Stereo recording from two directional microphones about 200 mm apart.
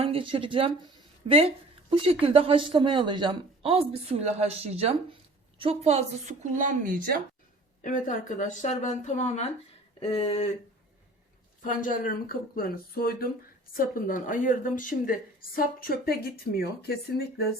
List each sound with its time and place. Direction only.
0.0 s a woman's voice: 25° right (ahead or behind); by 7.2 s 45° right (ahead or behind)
7.9 s speech: 40° left (ahead or behind)
10.0 s a sound: 25° left (ahead or behind)
11.6 s a woman's voice: 40° left (ahead or behind)